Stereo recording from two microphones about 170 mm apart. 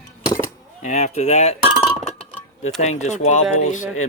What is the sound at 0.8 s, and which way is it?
Speech, 45° left (ahead or behind).